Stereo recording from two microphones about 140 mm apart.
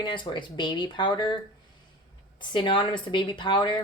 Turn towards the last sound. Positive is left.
turn(degrees=35)  # may be behind; listen again after turning